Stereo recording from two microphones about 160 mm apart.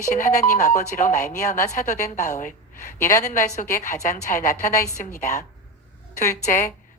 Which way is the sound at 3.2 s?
50° left (ahead or behind).